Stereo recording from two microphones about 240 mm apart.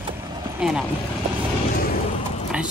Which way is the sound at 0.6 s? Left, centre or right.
Centre.